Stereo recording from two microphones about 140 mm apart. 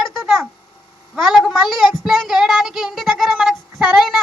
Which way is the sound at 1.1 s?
Centre (ahead or behind).